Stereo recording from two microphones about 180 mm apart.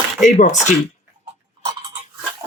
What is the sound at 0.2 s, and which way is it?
Speech, 40° left (ahead or behind).